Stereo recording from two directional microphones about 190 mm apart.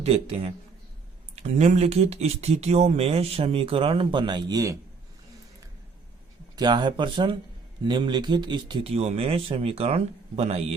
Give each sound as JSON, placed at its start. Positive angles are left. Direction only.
{"t": 0.0, "sound": "speech", "side_deg": -30}
{"t": 1.4, "sound": "speech", "side_deg": -35}
{"t": 6.6, "sound": "speech", "side_deg": -25}